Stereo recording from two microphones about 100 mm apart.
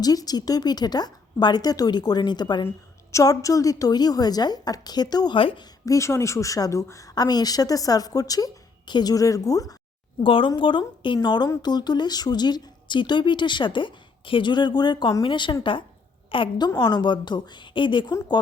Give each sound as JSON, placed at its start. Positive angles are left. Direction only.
{"t": 0.0, "sound": "speech", "side_deg": 40}
{"t": 3.1, "sound": "a woman's voice", "side_deg": 30}
{"t": 5.4, "sound": "a woman's voice", "side_deg": 60}
{"t": 5.8, "sound": "a woman's voice", "side_deg": 30}
{"t": 10.2, "sound": "a woman's voice", "side_deg": 60}
{"t": 16.6, "sound": "speech", "side_deg": 40}